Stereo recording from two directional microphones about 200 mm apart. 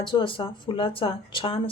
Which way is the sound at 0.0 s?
25° left (ahead or behind).